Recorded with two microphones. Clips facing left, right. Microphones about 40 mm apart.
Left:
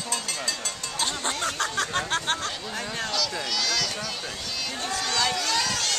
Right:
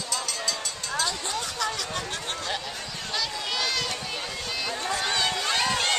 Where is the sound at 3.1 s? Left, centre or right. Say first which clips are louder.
Right 2 dB; right.